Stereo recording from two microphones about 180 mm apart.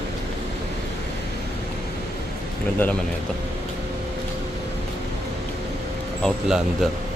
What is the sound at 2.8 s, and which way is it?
Speech, 10° left (ahead or behind).